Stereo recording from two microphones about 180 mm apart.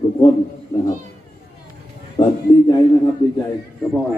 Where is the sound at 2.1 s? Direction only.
25° left (ahead or behind).